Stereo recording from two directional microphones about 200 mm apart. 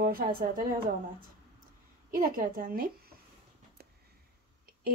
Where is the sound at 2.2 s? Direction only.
45° right (ahead or behind).